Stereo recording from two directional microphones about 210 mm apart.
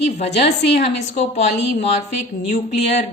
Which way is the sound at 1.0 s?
35° left (ahead or behind).